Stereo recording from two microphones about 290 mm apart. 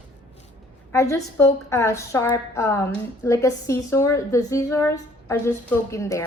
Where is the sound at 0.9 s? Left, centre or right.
Centre.